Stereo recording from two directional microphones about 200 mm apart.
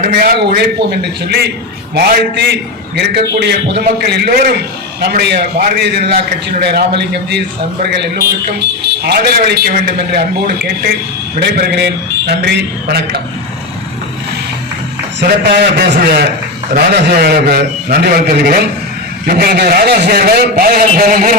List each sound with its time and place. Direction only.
0.1 s a man's voice: 55° right (ahead or behind)
9.0 s a man's voice: 55° right (ahead or behind)
15.2 s a man's voice: 55° right (ahead or behind)